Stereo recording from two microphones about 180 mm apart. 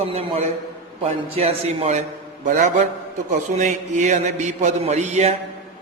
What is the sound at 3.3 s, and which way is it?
Mantra, 40° right (ahead or behind).